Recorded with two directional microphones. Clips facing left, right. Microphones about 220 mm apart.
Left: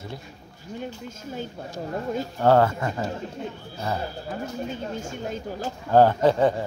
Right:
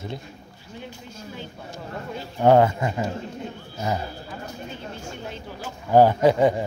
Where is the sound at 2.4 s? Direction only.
15° right (ahead or behind).